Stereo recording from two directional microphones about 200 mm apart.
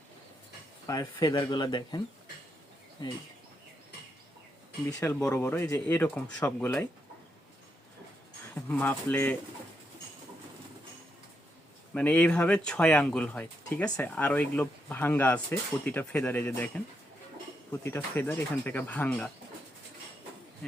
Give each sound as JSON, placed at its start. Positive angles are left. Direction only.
{"t": 0.9, "sound": "speech", "side_deg": 20}
{"t": 4.9, "sound": "speech", "side_deg": 5}
{"t": 8.5, "sound": "speech", "side_deg": 10}
{"t": 11.9, "sound": "speech", "side_deg": 5}